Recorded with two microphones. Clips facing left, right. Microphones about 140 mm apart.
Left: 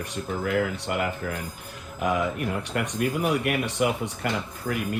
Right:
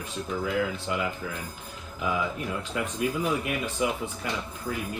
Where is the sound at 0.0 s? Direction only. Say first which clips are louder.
Left 2 dB; 65° left (ahead or behind).